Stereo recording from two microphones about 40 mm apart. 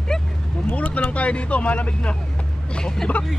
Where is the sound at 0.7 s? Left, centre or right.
Left.